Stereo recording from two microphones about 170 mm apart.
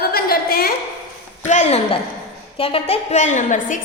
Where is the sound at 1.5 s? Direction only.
40° left (ahead or behind).